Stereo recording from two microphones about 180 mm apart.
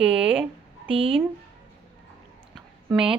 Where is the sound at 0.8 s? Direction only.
30° right (ahead or behind).